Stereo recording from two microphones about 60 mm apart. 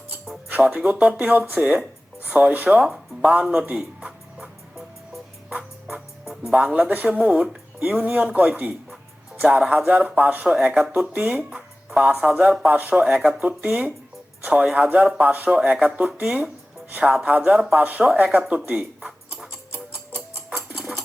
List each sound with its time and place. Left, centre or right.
0.5 s speech: right
3.4 s music: centre
5.5 s music: right
6.7 s speech: right
10.5 s speech: centre
11.3 s music: centre
11.9 s speech: right
14.4 s speech: right
18.7 s a sound: right